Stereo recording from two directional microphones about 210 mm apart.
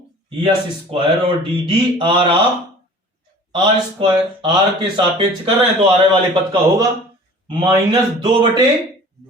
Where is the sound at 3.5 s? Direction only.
20° right (ahead or behind).